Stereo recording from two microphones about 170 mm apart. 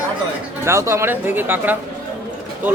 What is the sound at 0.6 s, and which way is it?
Speech, 15° right (ahead or behind).